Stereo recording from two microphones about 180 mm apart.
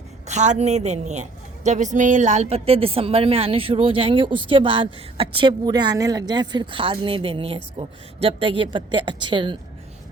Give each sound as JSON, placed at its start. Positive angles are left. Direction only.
{"t": 0.3, "sound": "a woman's voice", "side_deg": -40}